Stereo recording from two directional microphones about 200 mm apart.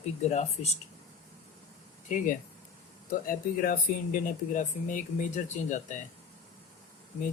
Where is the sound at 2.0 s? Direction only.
40° left (ahead or behind).